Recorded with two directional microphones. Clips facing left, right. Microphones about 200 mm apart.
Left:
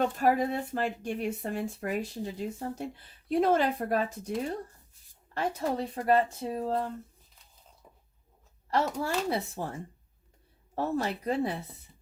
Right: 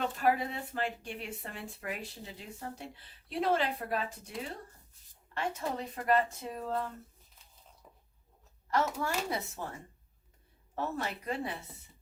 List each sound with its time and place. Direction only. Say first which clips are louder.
0.0 s speech: left 4 dB; 45° left (ahead or behind)
5.3 s speech: left 5 dB; 35° left (ahead or behind)
8.7 s speech: left 3 dB; 35° left (ahead or behind)
10.8 s speech: left 6 dB; 35° left (ahead or behind)